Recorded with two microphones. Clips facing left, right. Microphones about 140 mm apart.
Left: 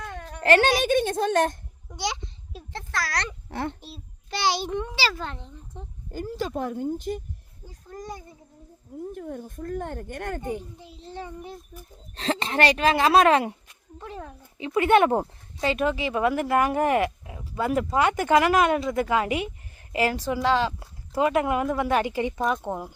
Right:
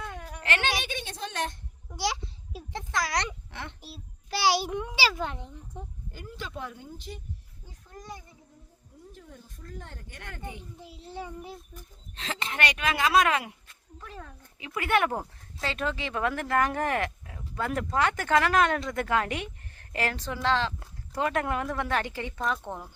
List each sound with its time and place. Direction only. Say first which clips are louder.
0.0 s a sound: left 2 dB; 5° right (ahead or behind)
0.4 s speech: left 11 dB; 40° left (ahead or behind)
1.9 s a child's voice: even; 5° right (ahead or behind)
3.5 s speech: left 10 dB; 40° left (ahead or behind)
3.8 s a child's voice: left 2 dB; 5° right (ahead or behind)
6.1 s a child's voice: left 14 dB; 40° left (ahead or behind)
9.1 s speech: left 14 dB; 55° left (ahead or behind)
10.8 s a child's voice: left 1 dB; 5° right (ahead or behind)
12.1 s speech: left 9 dB; 35° left (ahead or behind)
15.6 s speech: left 7 dB; 15° left (ahead or behind)